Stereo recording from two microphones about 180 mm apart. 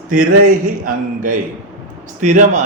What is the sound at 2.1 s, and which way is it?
Speech, 45° right (ahead or behind).